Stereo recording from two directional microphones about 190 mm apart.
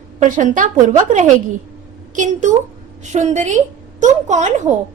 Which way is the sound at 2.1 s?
40° right (ahead or behind).